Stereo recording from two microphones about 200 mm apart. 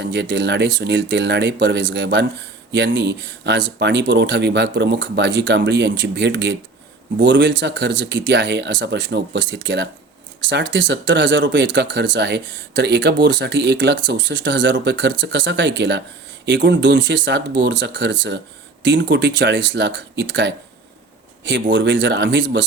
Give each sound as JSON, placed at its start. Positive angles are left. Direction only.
{"t": 0.0, "sound": "speech", "side_deg": -60}